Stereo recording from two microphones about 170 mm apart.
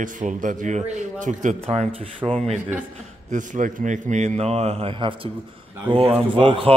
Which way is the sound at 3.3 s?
45° right (ahead or behind).